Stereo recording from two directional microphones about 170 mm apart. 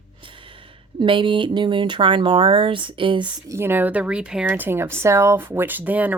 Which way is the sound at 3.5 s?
15° right (ahead or behind).